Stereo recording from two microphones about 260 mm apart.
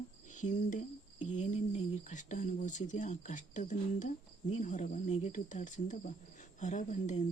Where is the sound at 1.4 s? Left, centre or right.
Left.